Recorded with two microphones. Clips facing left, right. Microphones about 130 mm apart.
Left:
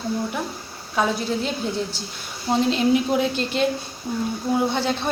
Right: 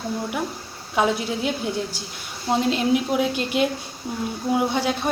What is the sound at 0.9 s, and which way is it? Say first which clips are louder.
Speech: right 1 dB; 15° right (ahead or behind).